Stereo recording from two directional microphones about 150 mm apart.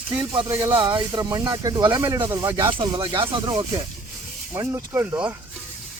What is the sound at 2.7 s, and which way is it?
Speech, 30° right (ahead or behind).